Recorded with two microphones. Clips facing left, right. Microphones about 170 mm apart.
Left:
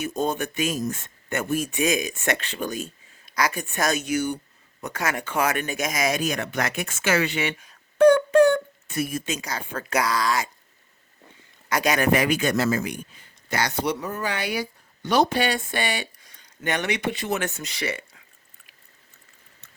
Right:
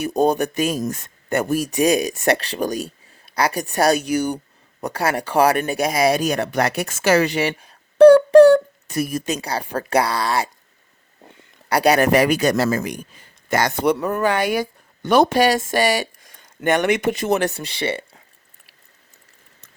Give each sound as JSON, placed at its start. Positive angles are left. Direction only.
{"t": 0.0, "sound": "speech", "side_deg": -35}
{"t": 11.7, "sound": "speech", "side_deg": -35}
{"t": 13.5, "sound": "speech", "side_deg": -50}